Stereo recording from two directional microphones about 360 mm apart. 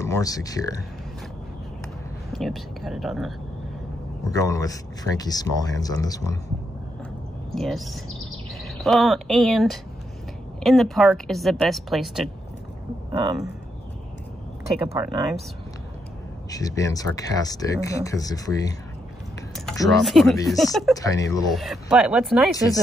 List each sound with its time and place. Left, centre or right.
0.0 s speech: centre
2.3 s speech: centre
7.5 s speech: centre
14.9 s speech: centre
16.4 s speech: centre